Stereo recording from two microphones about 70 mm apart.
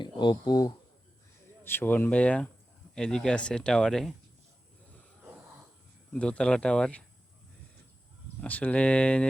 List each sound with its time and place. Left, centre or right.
0.0 s speech: left
1.6 s speech: left; by 4.0 s centre
6.1 s speech: centre
8.4 s speech: left